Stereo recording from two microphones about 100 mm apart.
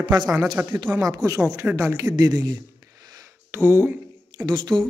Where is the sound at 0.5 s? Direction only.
20° right (ahead or behind).